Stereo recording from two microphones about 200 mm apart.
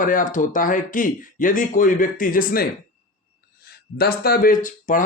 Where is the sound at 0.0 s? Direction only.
40° left (ahead or behind).